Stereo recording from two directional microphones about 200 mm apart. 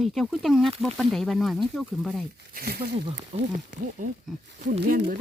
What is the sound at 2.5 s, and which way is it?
Speech, 50° right (ahead or behind).